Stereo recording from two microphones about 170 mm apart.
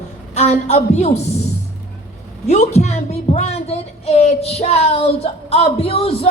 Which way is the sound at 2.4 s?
40° left (ahead or behind).